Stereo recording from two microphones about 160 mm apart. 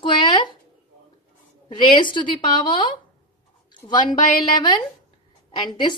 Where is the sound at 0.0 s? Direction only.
30° left (ahead or behind).